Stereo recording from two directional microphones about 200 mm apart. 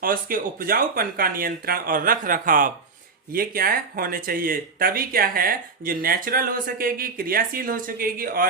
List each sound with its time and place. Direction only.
0.0 s speech: 45° right (ahead or behind)